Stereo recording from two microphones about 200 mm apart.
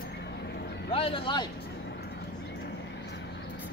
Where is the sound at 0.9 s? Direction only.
30° left (ahead or behind).